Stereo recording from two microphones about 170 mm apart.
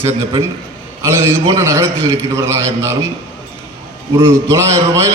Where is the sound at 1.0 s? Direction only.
15° right (ahead or behind).